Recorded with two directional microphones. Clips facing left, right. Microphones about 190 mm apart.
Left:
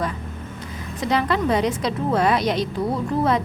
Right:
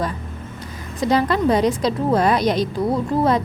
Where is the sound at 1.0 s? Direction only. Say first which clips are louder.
Right 4 dB; 40° right (ahead or behind).